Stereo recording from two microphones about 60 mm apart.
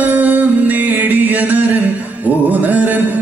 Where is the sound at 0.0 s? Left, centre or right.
Right.